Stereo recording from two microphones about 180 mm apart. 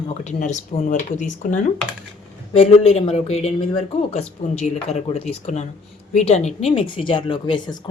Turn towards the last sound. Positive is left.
turn(degrees=30)  # may be behind; listen again after turning